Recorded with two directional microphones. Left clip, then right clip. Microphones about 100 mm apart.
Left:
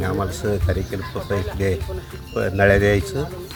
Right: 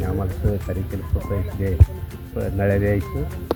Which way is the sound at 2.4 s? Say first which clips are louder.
Left 6 dB; 30° left (ahead or behind).